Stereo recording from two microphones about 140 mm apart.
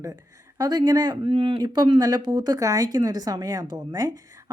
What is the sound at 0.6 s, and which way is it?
Speech, 30° right (ahead or behind).